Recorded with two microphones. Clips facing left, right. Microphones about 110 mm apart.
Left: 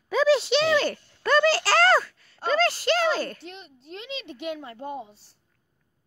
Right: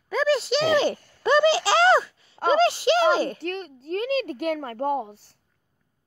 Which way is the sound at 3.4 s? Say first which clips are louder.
Right 11 dB; 55° right (ahead or behind).